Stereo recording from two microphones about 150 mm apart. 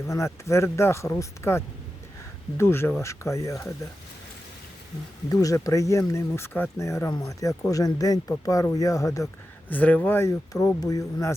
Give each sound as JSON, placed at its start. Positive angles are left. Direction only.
{"t": 0.1, "sound": "speech", "side_deg": 20}
{"t": 5.3, "sound": "speech", "side_deg": 20}
{"t": 9.7, "sound": "speech", "side_deg": 10}